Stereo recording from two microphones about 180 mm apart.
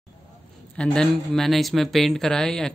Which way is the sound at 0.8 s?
5° left (ahead or behind).